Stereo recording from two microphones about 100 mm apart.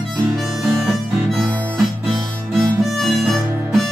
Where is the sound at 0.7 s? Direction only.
Centre (ahead or behind).